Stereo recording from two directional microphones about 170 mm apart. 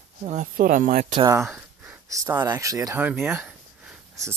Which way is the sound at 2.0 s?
20° right (ahead or behind).